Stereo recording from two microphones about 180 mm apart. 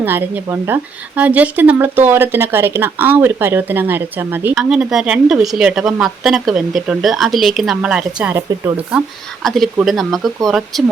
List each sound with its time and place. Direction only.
0.0 s speech: 10° right (ahead or behind)
9.4 s speech: centre (ahead or behind)